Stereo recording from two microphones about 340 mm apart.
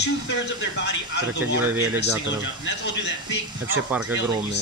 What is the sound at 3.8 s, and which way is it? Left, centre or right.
Speech, centre.